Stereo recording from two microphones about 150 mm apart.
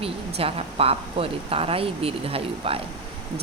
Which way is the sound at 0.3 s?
40° right (ahead or behind).